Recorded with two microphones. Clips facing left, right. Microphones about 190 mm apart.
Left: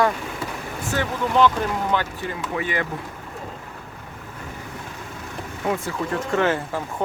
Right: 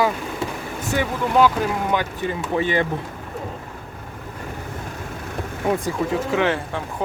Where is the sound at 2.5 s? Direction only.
30° right (ahead or behind).